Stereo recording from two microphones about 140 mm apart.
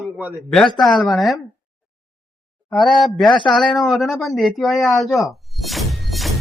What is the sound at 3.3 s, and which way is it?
Speech, 35° left (ahead or behind).